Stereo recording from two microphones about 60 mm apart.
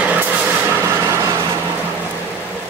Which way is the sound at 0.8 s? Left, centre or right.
Right.